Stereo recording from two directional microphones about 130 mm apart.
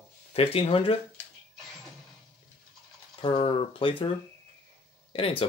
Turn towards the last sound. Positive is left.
turn(degrees=45)  # may be behind; listen again after turning